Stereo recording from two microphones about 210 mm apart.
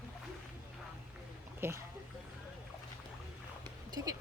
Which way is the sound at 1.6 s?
10° right (ahead or behind).